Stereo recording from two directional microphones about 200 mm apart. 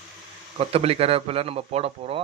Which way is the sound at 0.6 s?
30° right (ahead or behind).